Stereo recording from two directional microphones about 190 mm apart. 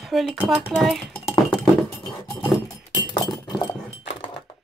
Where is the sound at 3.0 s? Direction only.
20° left (ahead or behind).